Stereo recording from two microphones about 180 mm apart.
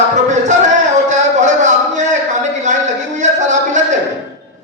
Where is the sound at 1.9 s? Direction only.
40° right (ahead or behind).